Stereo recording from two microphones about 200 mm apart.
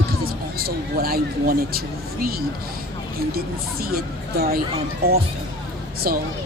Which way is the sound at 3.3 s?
50° right (ahead or behind).